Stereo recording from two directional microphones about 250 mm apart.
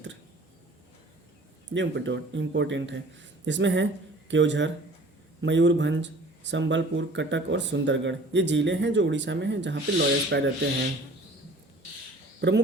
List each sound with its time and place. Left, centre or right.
1.7 s speech: right